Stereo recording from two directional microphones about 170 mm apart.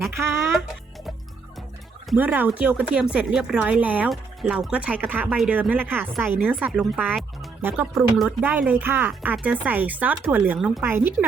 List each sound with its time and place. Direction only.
0.3 s speech: 15° right (ahead or behind)
2.1 s speech: 10° right (ahead or behind)
7.9 s speech: centre (ahead or behind)